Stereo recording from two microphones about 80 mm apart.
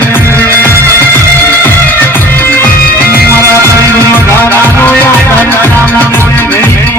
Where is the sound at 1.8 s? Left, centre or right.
Left.